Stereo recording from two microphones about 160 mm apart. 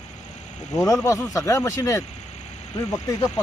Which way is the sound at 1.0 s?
20° left (ahead or behind).